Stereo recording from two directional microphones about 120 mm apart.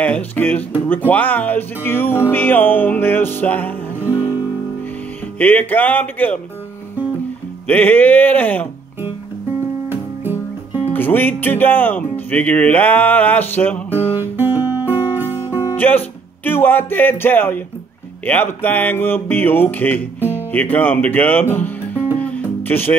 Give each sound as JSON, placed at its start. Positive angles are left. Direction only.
{"t": 0.0, "sound": "music", "side_deg": 15}
{"t": 5.4, "sound": "music", "side_deg": 15}
{"t": 7.6, "sound": "music", "side_deg": 15}
{"t": 9.8, "sound": "music", "side_deg": -15}
{"t": 10.9, "sound": "music", "side_deg": 15}
{"t": 14.2, "sound": "music", "side_deg": -20}
{"t": 15.7, "sound": "music", "side_deg": 15}